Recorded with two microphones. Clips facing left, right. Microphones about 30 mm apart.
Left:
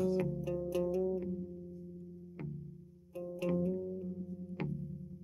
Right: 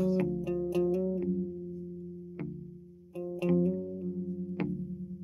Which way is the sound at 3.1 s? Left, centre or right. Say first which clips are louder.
Right 6 dB; centre.